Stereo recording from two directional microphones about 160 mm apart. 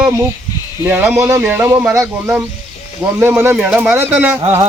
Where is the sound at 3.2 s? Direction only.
15° right (ahead or behind).